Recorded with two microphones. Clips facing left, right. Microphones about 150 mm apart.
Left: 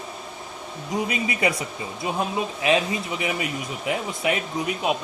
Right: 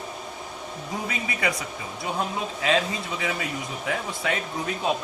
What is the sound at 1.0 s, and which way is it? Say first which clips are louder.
Speech: left 3 dB; 20° left (ahead or behind).